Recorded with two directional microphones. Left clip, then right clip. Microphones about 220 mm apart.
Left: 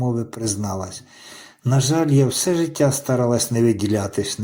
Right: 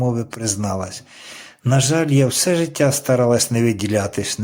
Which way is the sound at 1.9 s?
15° right (ahead or behind).